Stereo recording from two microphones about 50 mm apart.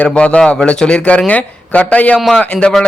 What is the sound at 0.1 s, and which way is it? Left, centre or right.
A man's voice, left.